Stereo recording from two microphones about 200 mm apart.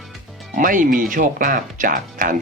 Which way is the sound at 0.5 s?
40° right (ahead or behind).